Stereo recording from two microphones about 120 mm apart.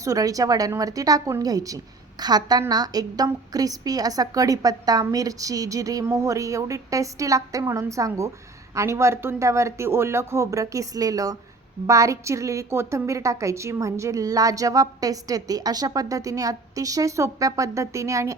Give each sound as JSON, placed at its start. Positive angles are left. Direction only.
{"t": 0.0, "sound": "a woman's voice", "side_deg": -30}